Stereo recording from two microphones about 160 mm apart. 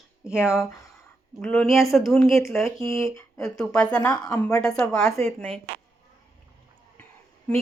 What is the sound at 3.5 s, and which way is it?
Speech, 5° left (ahead or behind).